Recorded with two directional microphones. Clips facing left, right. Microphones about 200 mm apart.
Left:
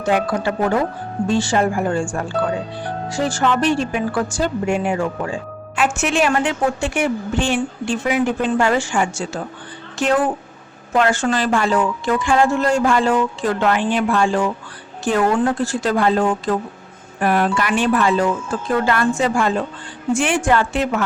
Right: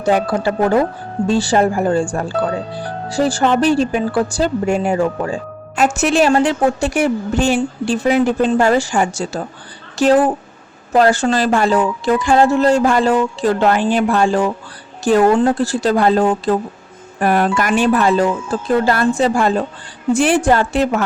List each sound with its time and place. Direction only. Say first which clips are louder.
0.0 s speech: right 3 dB; 35° right (ahead or behind)